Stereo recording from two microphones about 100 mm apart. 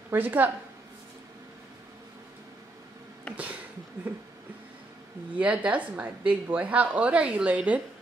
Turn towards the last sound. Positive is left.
turn(degrees=-15)  # may be behind; listen again after turning